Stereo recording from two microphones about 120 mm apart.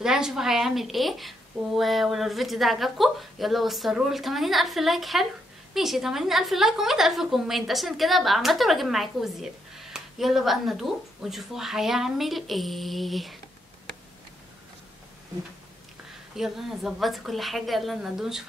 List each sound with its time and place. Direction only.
0.0 s a woman's voice: 5° right (ahead or behind)
16.3 s a woman's voice: centre (ahead or behind)